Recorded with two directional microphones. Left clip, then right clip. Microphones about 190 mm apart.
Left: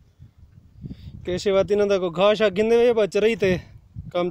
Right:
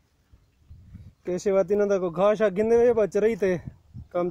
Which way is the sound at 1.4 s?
15° left (ahead or behind).